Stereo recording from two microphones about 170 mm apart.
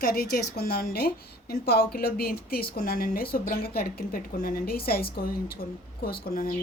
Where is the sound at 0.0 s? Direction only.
60° left (ahead or behind).